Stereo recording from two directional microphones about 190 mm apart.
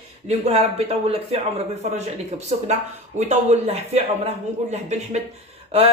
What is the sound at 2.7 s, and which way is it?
A man's voice, 35° right (ahead or behind).